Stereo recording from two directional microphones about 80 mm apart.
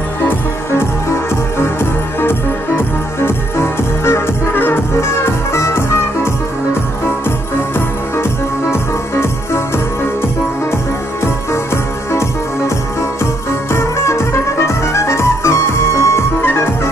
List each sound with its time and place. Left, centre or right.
0.2 s music: left
8.2 s music: left
11.2 s music: left